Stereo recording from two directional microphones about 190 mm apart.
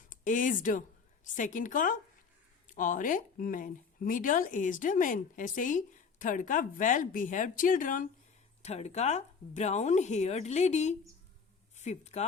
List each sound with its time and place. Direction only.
0.1 s speech: 45° left (ahead or behind)